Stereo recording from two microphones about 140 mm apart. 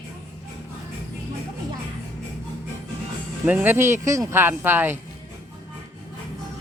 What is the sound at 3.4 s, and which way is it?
Speech, 15° right (ahead or behind).